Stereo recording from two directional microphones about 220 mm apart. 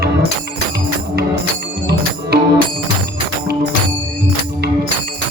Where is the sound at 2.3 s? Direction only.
45° right (ahead or behind).